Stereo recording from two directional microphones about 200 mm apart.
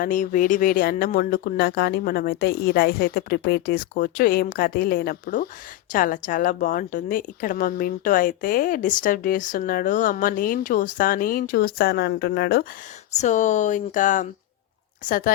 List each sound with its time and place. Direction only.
0.0 s a woman's voice: 40° left (ahead or behind)
13.1 s a woman's voice: 35° left (ahead or behind)